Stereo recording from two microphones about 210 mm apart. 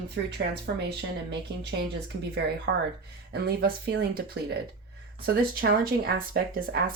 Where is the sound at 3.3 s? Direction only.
50° right (ahead or behind).